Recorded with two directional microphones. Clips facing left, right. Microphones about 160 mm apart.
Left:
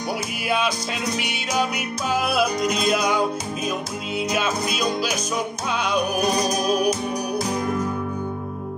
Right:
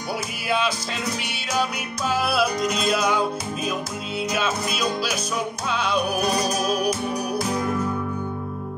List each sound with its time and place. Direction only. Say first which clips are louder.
2.9 s music: even; 15° left (ahead or behind)
5.9 s music: left 1 dB; 15° left (ahead or behind)